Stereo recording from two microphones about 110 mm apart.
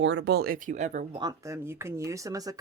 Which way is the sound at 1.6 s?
25° right (ahead or behind).